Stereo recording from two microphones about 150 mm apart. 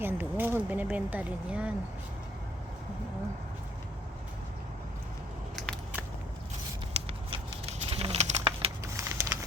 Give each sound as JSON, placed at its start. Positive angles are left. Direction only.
{"t": 0.0, "sound": "speech", "side_deg": -15}
{"t": 7.1, "sound": "bird", "side_deg": -40}
{"t": 9.0, "sound": "a sound", "side_deg": -20}